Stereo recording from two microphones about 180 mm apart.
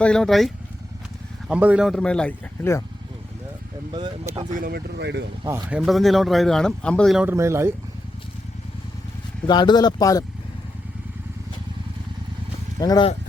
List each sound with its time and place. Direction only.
0.0 s speech: 5° left (ahead or behind)
3.9 s speech: 25° right (ahead or behind)
4.5 s speech: 55° right (ahead or behind); by 5.2 s 70° right (ahead or behind)
5.4 s speech: 20° right (ahead or behind)
5.8 s speech: centre (ahead or behind)
7.3 s speech: 15° right (ahead or behind)
9.5 s speech: 25° left (ahead or behind)
12.8 s speech: 20° left (ahead or behind)